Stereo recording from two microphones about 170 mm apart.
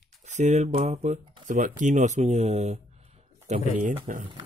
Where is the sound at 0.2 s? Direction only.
45° right (ahead or behind).